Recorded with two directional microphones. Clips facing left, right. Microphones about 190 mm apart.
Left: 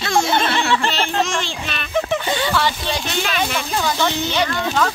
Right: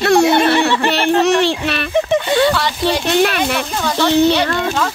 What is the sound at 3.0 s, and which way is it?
Speech, 60° right (ahead or behind).